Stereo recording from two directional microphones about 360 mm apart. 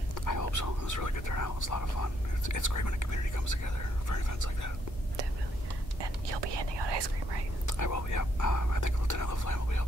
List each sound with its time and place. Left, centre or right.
0.1 s speech: left
6.4 s speech: right
7.6 s speech: left